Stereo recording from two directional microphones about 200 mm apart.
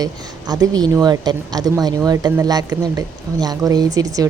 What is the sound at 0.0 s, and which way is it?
A woman's voice, 20° right (ahead or behind).